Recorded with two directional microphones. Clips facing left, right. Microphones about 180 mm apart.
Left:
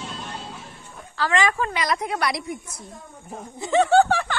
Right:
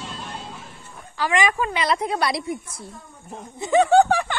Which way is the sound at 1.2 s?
15° right (ahead or behind).